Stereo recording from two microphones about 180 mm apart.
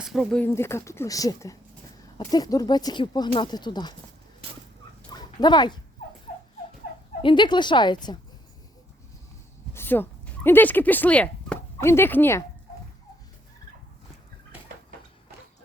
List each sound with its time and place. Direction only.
0.0 s speech: centre (ahead or behind); by 3.9 s 25° left (ahead or behind)
5.0 s dog: 25° left (ahead or behind)
7.2 s speech: 25° left (ahead or behind)
9.7 s speech: 10° left (ahead or behind)